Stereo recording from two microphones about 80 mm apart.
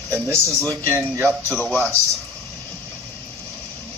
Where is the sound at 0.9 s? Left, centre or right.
Right.